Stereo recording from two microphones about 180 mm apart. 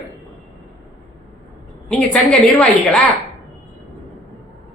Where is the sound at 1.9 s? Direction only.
5° left (ahead or behind).